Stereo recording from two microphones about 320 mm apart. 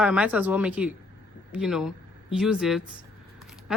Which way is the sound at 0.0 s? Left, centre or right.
Centre.